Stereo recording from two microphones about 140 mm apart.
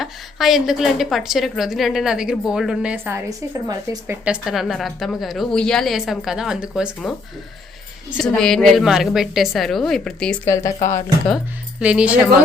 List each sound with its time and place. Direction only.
0.0 s a woman's voice: centre (ahead or behind); by 4.2 s 20° right (ahead or behind)
4.3 s a woman's voice: centre (ahead or behind)
8.2 s a woman's voice: 5° left (ahead or behind)
10.4 s speech: 20° left (ahead or behind)
11.8 s speech: 10° right (ahead or behind)